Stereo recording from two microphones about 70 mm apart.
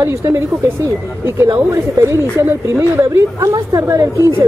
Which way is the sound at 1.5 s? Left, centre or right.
Right.